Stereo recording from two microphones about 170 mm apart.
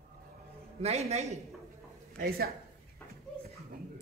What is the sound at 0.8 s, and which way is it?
Speech, 40° right (ahead or behind).